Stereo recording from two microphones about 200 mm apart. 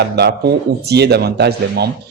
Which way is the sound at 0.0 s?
55° right (ahead or behind).